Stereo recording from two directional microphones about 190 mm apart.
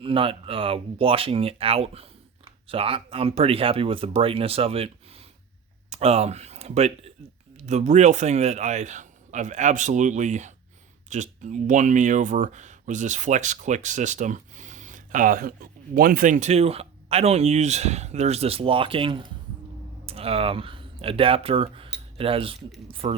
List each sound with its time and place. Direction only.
0.0 s speech: 30° right (ahead or behind)
5.9 s speech: 35° right (ahead or behind)